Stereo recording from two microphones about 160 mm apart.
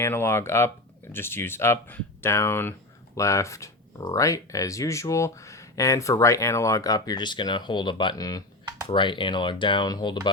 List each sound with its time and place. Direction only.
0.0 s speech: 15° left (ahead or behind)